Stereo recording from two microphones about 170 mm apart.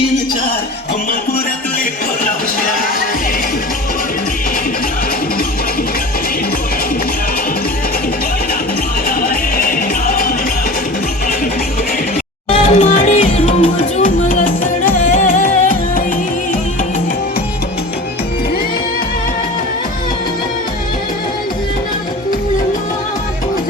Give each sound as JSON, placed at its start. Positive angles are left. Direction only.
{"t": 9.0, "sound": "music", "side_deg": 60}
{"t": 12.5, "sound": "music", "side_deg": 45}